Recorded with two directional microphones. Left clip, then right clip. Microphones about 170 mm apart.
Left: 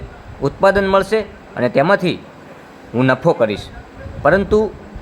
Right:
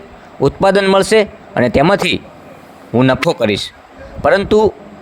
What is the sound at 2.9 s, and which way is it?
Speech, 25° right (ahead or behind).